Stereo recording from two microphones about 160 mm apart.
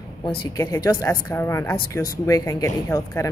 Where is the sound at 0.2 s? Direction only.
20° left (ahead or behind).